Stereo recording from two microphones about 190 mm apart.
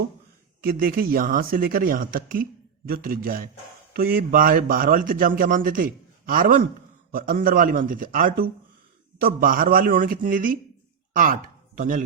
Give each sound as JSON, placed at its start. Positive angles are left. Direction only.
{"t": 0.6, "sound": "speech", "side_deg": -50}